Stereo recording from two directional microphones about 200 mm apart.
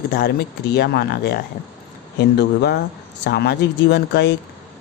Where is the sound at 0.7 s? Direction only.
55° left (ahead or behind).